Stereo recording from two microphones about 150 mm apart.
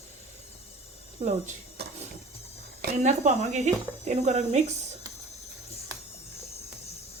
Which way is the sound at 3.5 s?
50° right (ahead or behind).